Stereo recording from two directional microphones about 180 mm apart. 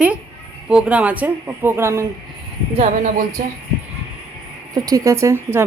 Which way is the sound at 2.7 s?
40° right (ahead or behind).